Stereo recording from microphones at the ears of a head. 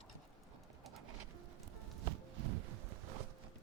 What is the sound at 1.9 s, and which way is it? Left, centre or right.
Walk, right.